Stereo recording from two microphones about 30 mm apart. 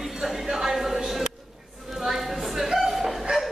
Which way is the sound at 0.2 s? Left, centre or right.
Centre.